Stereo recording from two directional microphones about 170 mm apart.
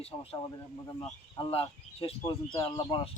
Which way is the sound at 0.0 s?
35° left (ahead or behind).